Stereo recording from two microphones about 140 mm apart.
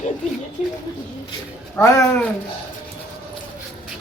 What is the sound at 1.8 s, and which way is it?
Speech, 25° left (ahead or behind).